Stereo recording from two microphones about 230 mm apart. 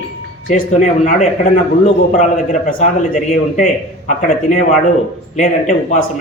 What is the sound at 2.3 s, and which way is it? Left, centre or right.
A man's voice, left.